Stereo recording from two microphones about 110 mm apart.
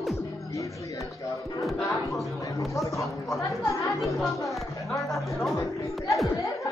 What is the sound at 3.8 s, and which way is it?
Speech, 30° left (ahead or behind).